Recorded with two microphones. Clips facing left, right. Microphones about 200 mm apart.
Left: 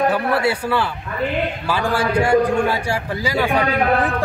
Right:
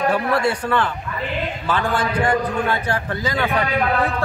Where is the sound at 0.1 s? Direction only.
5° left (ahead or behind).